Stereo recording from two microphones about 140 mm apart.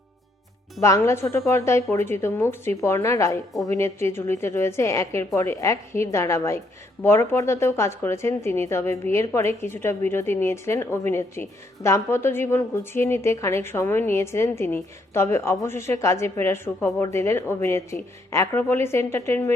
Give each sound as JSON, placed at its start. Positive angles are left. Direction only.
{"t": 0.8, "sound": "a woman's voice", "side_deg": 20}